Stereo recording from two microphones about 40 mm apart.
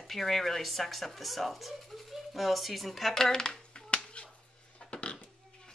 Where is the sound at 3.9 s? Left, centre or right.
Left.